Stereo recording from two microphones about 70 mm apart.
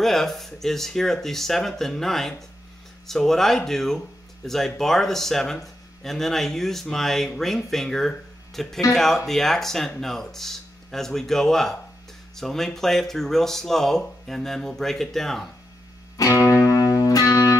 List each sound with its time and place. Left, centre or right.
0.0 s speech: centre
16.2 s music: left